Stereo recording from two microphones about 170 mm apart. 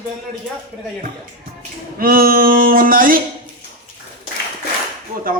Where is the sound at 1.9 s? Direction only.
60° right (ahead or behind).